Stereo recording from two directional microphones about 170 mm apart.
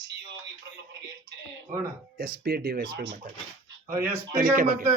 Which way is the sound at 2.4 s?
65° right (ahead or behind).